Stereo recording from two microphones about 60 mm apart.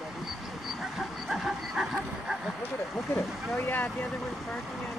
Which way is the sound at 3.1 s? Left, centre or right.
Left.